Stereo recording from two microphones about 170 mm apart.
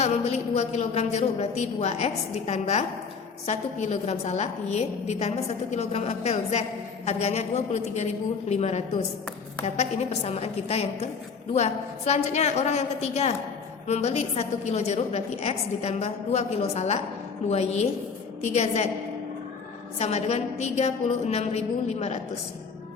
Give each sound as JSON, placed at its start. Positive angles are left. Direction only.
{"t": 0.0, "sound": "a woman's voice", "side_deg": 40}
{"t": 20.0, "sound": "a woman's voice", "side_deg": 40}